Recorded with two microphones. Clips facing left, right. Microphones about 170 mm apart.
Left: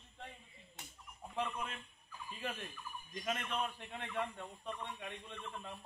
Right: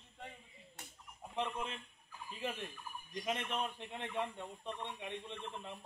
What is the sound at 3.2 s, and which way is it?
A man's voice, 20° right (ahead or behind).